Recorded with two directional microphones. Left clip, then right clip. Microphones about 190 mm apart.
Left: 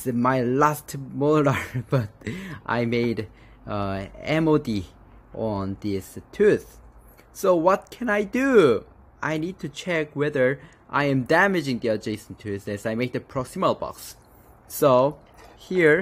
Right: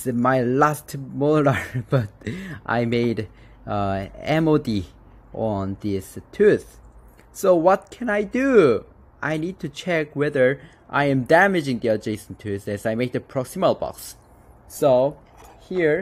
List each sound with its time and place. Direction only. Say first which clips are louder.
0.0 s speech: right 2 dB; 5° right (ahead or behind)
14.8 s speech: right 1 dB; 15° left (ahead or behind)